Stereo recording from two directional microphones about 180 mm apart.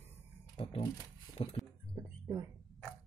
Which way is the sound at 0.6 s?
30° left (ahead or behind).